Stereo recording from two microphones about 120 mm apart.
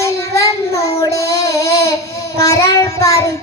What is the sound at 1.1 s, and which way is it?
Child singing, 25° left (ahead or behind).